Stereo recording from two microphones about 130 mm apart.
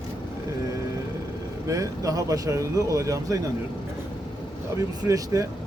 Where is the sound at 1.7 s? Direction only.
25° right (ahead or behind).